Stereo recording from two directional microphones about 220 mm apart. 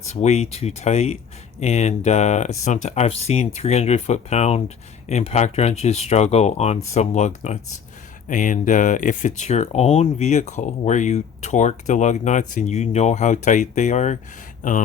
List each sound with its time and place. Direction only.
0.0 s speech: 30° left (ahead or behind)